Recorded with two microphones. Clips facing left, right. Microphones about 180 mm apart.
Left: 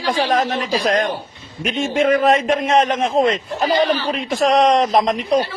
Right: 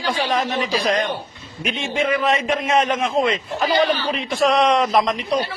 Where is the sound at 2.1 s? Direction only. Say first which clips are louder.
Left 6 dB; 45° left (ahead or behind).